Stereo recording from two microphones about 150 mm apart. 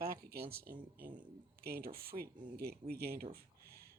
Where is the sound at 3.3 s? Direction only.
90° right.